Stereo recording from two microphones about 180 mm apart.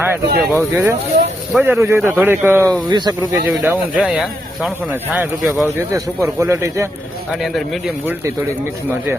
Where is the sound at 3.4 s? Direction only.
10° right (ahead or behind).